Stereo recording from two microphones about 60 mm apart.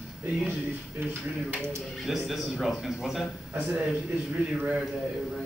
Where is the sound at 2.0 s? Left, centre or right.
Centre.